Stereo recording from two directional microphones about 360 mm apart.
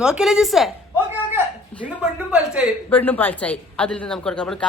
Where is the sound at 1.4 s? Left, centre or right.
Centre.